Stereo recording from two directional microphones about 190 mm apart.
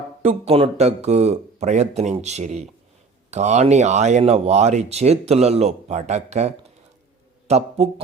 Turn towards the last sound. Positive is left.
turn(degrees=-35)  # may be behind; listen again after turning